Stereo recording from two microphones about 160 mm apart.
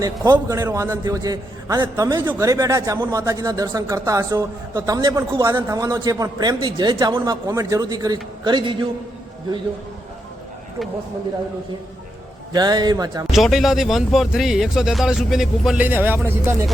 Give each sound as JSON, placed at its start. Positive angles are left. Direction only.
{"t": 0.3, "sound": "a man's voice", "side_deg": -15}
{"t": 12.5, "sound": "a man's voice", "side_deg": -25}
{"t": 13.3, "sound": "speech", "side_deg": 0}